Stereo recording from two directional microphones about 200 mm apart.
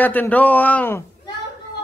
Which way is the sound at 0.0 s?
10° left (ahead or behind).